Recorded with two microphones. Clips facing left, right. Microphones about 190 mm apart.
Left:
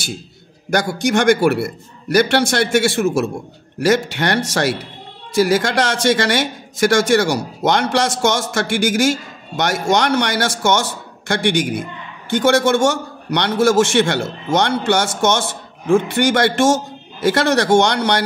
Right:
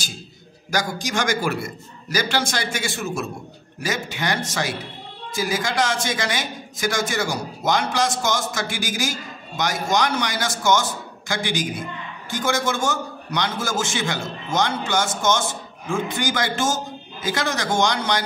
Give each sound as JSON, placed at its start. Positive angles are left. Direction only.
{"t": 0.7, "sound": "a man's voice", "side_deg": 65}